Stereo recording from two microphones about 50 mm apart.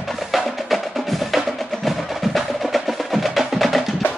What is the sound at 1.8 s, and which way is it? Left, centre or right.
Percussion, centre.